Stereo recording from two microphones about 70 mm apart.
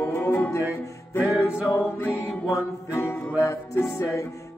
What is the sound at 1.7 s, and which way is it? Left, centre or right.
Music, left.